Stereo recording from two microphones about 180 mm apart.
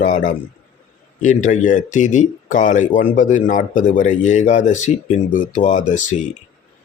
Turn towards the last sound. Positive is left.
turn(degrees=45)  # may be behind; listen again after turning